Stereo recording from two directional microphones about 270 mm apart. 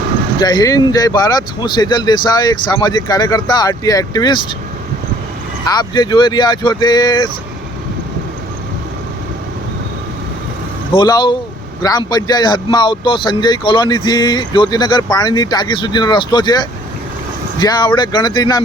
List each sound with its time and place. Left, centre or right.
0.3 s a man's voice: centre
5.6 s a man's voice: centre
10.9 s a man's voice: centre